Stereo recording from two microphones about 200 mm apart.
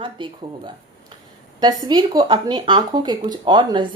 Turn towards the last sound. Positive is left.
turn(degrees=-25)  # may be behind; listen again after turning